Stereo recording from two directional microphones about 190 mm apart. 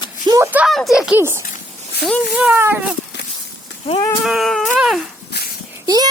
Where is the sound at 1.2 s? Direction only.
15° right (ahead or behind).